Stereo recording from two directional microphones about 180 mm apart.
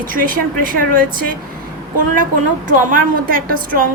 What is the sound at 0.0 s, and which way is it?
A woman's voice, 50° right (ahead or behind).